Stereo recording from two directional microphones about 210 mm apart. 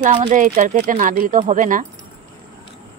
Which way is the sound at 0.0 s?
35° right (ahead or behind).